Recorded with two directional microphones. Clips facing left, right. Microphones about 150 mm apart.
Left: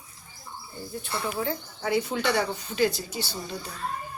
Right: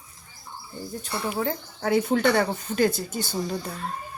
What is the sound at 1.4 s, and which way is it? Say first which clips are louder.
Speech: right 3 dB; 50° right (ahead or behind).